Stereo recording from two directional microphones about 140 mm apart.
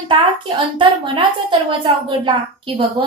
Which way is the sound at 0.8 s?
35° right (ahead or behind).